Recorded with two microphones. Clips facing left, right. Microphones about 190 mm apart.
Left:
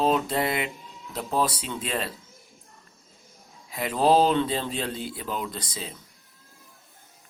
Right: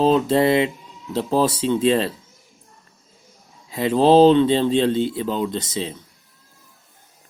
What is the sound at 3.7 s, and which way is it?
Speech, 25° right (ahead or behind).